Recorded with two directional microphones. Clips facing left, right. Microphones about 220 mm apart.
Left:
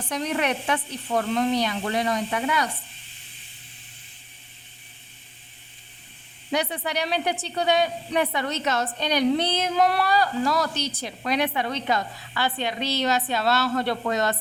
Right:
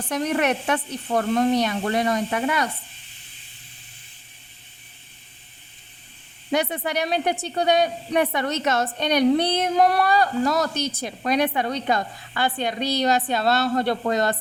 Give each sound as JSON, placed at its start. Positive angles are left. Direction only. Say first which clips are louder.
{"t": 0.1, "sound": "a woman's voice", "louder": "right 3 dB", "side_deg": -50}
{"t": 6.5, "sound": "a woman's voice", "louder": "right 3 dB", "side_deg": -50}